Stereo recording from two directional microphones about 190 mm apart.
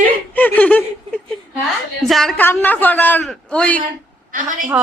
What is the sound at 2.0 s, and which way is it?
A man's voice, centre (ahead or behind).